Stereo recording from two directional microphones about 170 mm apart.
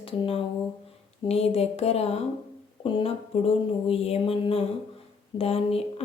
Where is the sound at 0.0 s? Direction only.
35° left (ahead or behind).